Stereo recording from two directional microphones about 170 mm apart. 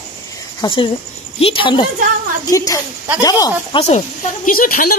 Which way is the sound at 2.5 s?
20° left (ahead or behind).